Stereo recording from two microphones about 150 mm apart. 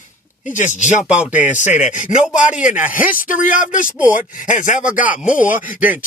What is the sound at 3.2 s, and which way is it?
Speech, 65° left (ahead or behind).